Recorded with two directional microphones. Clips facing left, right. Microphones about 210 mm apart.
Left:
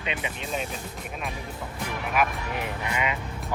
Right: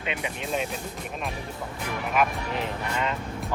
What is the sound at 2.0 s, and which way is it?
Speech, centre (ahead or behind).